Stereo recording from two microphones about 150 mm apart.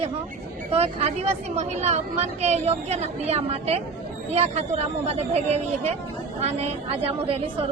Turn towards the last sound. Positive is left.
turn(degrees=-40)  # may be behind; listen again after turning